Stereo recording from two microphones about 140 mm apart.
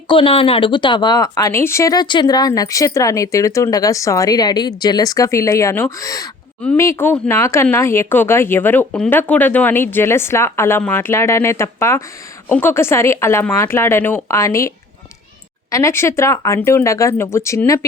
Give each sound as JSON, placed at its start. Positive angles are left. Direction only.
{"t": 0.1, "sound": "speech", "side_deg": 40}
{"t": 15.7, "sound": "speech", "side_deg": 20}